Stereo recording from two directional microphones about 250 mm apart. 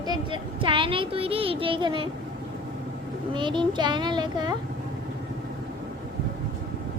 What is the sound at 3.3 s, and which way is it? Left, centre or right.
A child's voice, centre.